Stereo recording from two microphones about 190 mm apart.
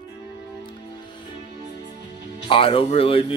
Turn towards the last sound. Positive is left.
turn(degrees=30)  # may be behind; listen again after turning